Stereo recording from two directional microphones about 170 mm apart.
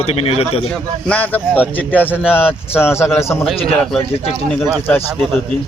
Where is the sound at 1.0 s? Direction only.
10° left (ahead or behind).